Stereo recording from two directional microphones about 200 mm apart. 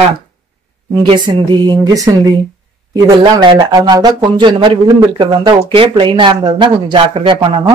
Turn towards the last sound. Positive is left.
turn(degrees=-25)  # may be behind; listen again after turning